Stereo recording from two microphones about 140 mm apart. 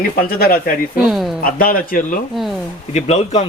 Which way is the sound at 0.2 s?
90° left.